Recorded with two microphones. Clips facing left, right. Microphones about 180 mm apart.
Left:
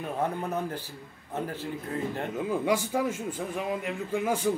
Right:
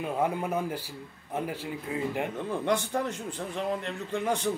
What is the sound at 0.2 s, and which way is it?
Speech, 10° right (ahead or behind).